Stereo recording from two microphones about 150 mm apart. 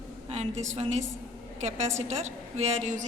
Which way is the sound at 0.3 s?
45° right (ahead or behind).